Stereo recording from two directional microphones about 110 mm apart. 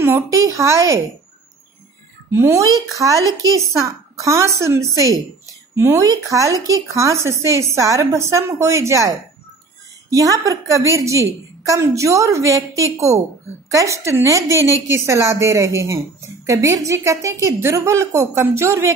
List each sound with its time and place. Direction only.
0.0 s a woman's voice: 25° right (ahead or behind)
2.3 s a woman's voice: 25° right (ahead or behind)